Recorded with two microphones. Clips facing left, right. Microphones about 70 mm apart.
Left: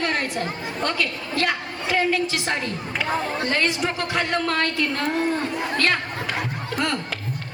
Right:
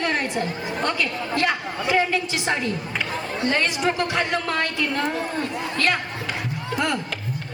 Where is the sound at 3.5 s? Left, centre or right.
Centre.